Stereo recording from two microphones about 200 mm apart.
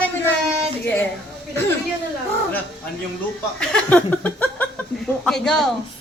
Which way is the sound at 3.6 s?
5° left (ahead or behind).